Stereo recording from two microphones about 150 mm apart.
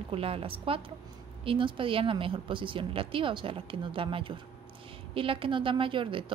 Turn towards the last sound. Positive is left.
turn(degrees=-35)  # may be behind; listen again after turning